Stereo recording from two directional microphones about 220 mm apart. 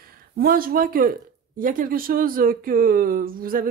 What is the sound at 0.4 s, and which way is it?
Speech, 40° right (ahead or behind).